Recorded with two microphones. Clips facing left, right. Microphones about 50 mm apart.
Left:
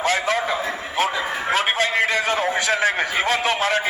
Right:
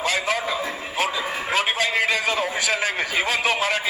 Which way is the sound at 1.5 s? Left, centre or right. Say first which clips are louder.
Left 1 dB; left.